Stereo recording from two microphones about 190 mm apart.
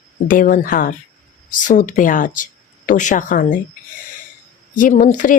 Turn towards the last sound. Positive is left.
turn(degrees=40)  # may be behind; listen again after turning